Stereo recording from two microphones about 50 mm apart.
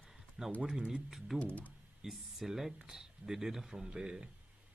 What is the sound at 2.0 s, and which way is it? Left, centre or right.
Speech, centre.